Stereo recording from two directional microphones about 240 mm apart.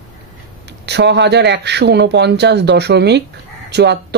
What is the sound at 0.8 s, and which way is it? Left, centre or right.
Speech, right.